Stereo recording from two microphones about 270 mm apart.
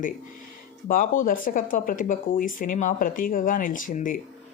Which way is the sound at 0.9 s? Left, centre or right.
Left.